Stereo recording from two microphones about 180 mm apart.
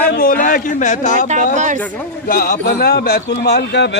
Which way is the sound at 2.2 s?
55° left (ahead or behind).